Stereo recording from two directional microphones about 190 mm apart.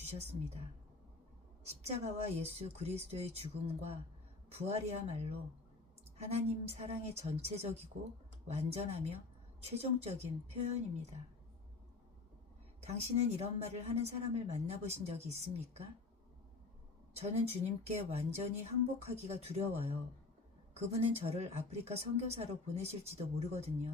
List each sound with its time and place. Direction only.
0.1 s a woman's voice: 35° right (ahead or behind)
1.6 s a woman's voice: 35° right (ahead or behind)
12.8 s a woman's voice: 35° right (ahead or behind)
17.2 s a woman's voice: 35° right (ahead or behind)